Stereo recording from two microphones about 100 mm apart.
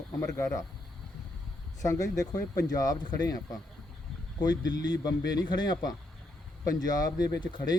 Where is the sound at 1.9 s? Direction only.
35° left (ahead or behind).